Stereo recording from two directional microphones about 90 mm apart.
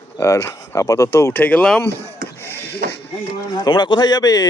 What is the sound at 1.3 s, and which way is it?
Speech, 20° left (ahead or behind).